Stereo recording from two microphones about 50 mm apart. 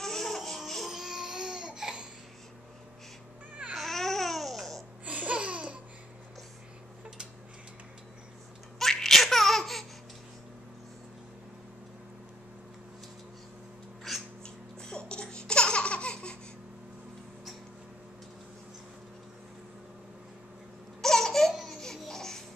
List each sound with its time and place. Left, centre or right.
0.0 s laughter: centre
0.8 s baby cry: centre
3.7 s babbling: centre
5.0 s laughter: right
8.7 s laughter: centre
14.1 s a sound: centre
14.4 s laughter: centre
21.0 s laughter: centre